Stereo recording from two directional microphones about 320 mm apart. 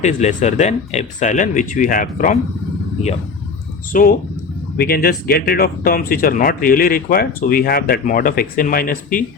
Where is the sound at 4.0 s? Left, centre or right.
Left.